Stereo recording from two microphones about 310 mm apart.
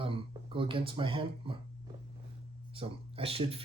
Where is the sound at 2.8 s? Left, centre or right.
Centre.